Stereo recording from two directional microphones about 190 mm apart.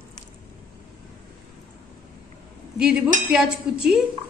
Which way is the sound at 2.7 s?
5° right (ahead or behind).